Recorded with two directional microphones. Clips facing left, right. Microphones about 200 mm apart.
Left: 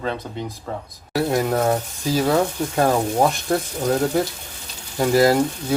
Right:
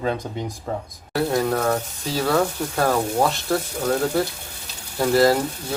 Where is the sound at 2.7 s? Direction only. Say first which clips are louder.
Left 3 dB; 15° left (ahead or behind).